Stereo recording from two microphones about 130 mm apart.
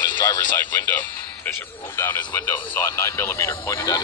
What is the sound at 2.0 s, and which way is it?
Speech, 20° left (ahead or behind).